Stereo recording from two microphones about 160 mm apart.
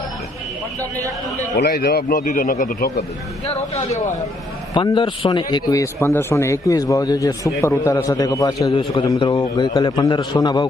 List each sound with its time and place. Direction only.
1.5 s speech: 85° left; by 3.0 s 70° left (ahead or behind)
3.5 s speech: 45° left (ahead or behind)
4.7 s a man's voice: 30° left (ahead or behind)